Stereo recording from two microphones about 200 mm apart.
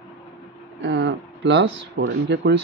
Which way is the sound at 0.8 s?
65° right (ahead or behind).